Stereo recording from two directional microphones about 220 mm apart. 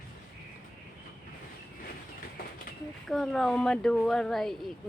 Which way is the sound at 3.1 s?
Centre (ahead or behind).